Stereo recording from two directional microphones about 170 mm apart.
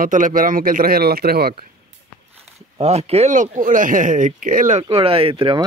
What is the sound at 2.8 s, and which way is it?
Speech, 40° right (ahead or behind).